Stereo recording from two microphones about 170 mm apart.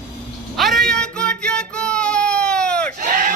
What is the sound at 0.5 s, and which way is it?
Child singing, centre (ahead or behind).